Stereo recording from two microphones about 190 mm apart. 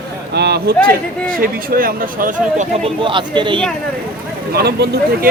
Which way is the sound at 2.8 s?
25° right (ahead or behind).